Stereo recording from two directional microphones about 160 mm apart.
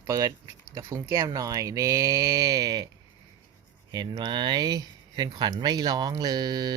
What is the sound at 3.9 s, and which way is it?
Speech, 25° right (ahead or behind).